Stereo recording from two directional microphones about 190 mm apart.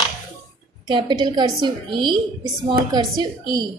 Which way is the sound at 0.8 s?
25° right (ahead or behind).